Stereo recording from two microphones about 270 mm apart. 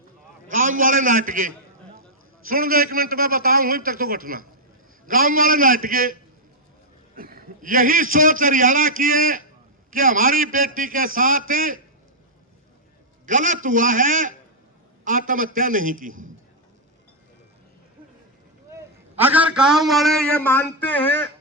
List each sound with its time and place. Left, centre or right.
0.5 s a man's voice: right
7.2 s a man's voice: right
13.2 s a man's voice: right
18.7 s a man's voice: centre